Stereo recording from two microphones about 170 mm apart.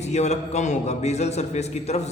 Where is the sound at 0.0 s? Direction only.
40° left (ahead or behind).